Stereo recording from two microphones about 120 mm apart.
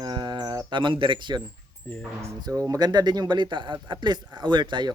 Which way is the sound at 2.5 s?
30° right (ahead or behind).